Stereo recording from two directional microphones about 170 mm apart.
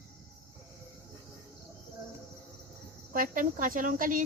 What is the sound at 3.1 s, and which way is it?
Speech, 55° right (ahead or behind).